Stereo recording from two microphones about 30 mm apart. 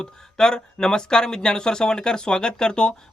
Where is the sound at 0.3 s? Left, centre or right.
Left.